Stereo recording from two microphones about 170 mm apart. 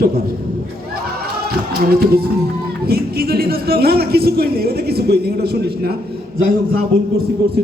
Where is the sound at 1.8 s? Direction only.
65° right (ahead or behind).